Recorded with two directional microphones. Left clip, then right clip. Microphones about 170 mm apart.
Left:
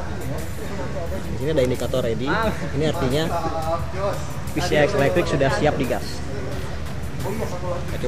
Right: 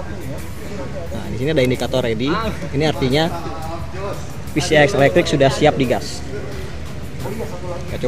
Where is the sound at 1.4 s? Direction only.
50° right (ahead or behind).